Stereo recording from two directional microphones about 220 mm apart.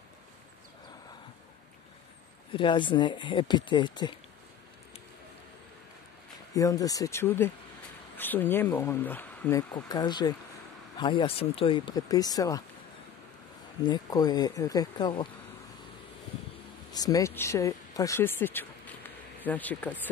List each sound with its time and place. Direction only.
2.5 s speech: 20° left (ahead or behind)
6.5 s speech: 15° left (ahead or behind)
13.8 s speech: 20° left (ahead or behind)
16.9 s speech: 15° left (ahead or behind)